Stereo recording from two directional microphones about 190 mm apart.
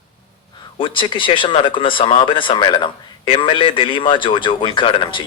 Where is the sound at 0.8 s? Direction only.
25° left (ahead or behind).